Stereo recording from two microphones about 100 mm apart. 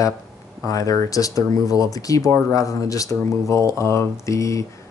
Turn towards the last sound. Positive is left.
turn(degrees=30)  # may be behind; listen again after turning